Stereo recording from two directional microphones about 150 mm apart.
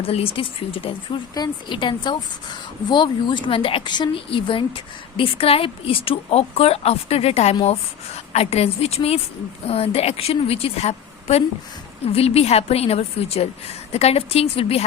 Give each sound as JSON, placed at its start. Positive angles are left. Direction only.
{"t": 0.0, "sound": "a woman's voice", "side_deg": 40}